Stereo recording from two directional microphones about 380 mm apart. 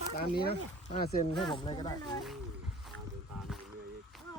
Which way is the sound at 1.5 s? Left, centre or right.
Centre.